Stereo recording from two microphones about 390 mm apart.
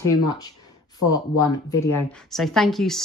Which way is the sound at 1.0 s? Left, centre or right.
Left.